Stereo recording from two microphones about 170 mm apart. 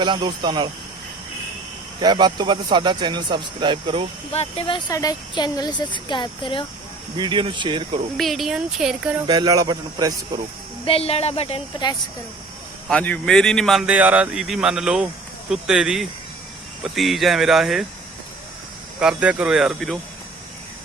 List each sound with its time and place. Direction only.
0.0 s a man's voice: 30° right (ahead or behind)
2.0 s a man's voice: 25° right (ahead or behind)
4.3 s speech: 35° left (ahead or behind)
7.2 s a man's voice: 30° right (ahead or behind)
8.1 s a man's voice: centre (ahead or behind)
9.2 s a man's voice: 25° right (ahead or behind)
10.8 s speech: 35° left (ahead or behind)
12.9 s a man's voice: 5° left (ahead or behind)
18.9 s a man's voice: 5° right (ahead or behind)